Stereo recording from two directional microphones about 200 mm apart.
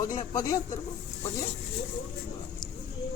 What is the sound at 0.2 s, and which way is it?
Speech, 20° left (ahead or behind).